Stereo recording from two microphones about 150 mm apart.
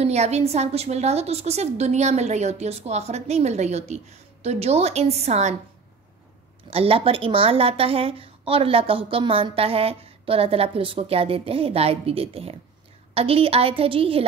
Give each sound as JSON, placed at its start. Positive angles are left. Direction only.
{"t": 0.0, "sound": "a woman's voice", "side_deg": -45}
{"t": 6.7, "sound": "a woman's voice", "side_deg": -40}